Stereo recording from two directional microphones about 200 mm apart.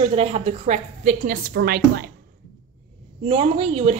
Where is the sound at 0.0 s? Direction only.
30° right (ahead or behind); by 2.0 s 50° right (ahead or behind).